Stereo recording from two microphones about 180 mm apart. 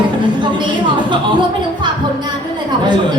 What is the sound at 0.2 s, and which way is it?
A woman's voice, 25° right (ahead or behind).